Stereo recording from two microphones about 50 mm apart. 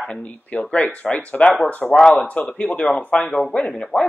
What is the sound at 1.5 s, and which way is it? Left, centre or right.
A man's voice, left.